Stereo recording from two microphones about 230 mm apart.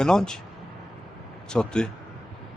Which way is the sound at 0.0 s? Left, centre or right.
Centre.